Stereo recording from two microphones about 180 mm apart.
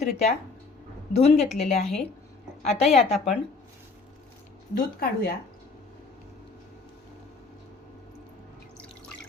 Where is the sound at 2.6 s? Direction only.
35° left (ahead or behind).